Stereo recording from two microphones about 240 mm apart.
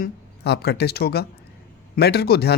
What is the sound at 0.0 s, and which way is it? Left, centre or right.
Speech, left.